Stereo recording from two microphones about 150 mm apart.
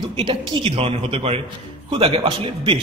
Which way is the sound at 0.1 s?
35° right (ahead or behind).